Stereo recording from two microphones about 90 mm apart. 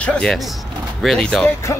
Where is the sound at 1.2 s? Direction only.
10° left (ahead or behind).